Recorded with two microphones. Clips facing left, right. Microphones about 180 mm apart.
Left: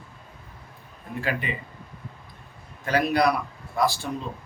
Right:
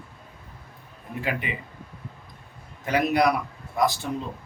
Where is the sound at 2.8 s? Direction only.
20° right (ahead or behind).